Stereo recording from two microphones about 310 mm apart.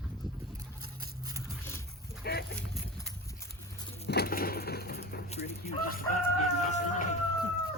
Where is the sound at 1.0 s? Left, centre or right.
Centre.